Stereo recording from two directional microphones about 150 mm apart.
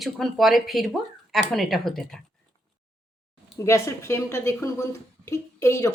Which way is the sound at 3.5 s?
20° left (ahead or behind).